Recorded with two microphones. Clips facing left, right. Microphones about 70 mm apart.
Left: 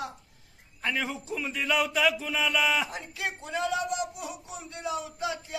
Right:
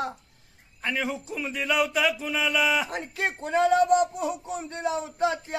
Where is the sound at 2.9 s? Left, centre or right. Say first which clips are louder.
Right 5 dB; right.